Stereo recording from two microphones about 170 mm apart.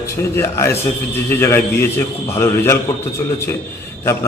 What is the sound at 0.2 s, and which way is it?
A man's voice, 15° left (ahead or behind).